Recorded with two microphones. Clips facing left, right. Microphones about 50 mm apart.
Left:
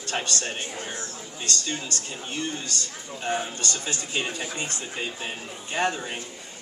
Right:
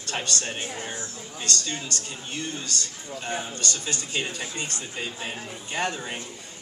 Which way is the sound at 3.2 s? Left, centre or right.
Centre.